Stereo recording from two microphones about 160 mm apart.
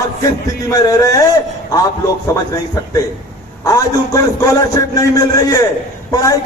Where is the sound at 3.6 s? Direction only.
20° left (ahead or behind).